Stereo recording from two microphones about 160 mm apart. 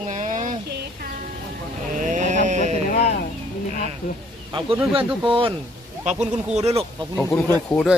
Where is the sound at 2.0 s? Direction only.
50° right (ahead or behind).